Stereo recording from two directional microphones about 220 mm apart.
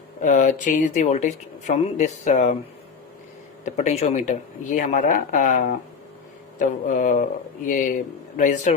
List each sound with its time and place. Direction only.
0.2 s speech: 35° left (ahead or behind)
3.6 s speech: 35° left (ahead or behind)